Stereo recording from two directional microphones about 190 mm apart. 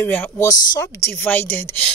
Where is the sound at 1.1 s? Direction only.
10° left (ahead or behind).